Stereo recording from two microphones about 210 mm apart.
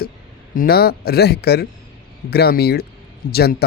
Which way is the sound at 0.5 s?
45° left (ahead or behind).